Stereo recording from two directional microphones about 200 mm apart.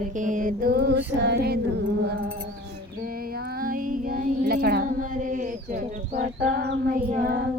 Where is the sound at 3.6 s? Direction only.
45° right (ahead or behind).